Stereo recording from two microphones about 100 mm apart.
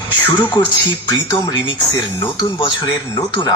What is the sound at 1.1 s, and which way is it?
Speech, 50° left (ahead or behind).